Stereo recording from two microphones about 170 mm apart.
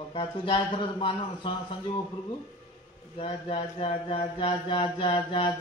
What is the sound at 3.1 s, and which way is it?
Speech, 30° left (ahead or behind).